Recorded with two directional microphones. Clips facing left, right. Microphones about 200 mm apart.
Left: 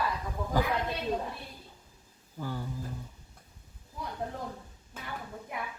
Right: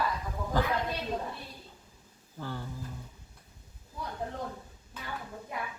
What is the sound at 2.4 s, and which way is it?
Speech, 10° left (ahead or behind).